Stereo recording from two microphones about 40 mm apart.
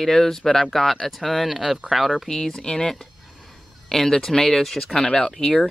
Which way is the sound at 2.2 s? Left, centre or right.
Centre.